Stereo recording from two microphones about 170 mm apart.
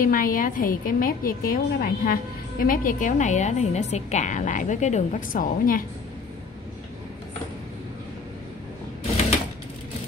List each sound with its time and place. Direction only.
0.0 s a woman's voice: 55° left (ahead or behind)